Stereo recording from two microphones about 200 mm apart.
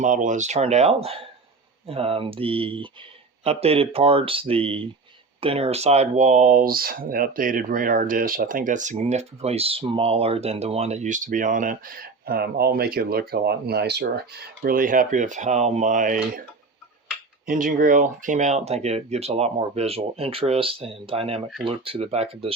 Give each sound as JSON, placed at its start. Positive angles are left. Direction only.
{"t": 0.0, "sound": "speech", "side_deg": -40}
{"t": 17.4, "sound": "speech", "side_deg": -45}